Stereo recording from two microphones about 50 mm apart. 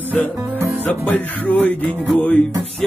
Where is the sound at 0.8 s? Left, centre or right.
Left.